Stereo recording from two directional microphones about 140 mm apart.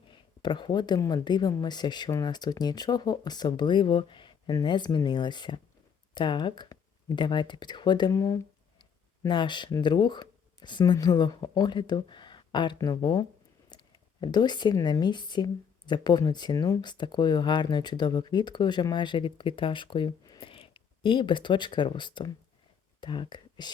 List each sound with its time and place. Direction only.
0.4 s speech: 35° left (ahead or behind)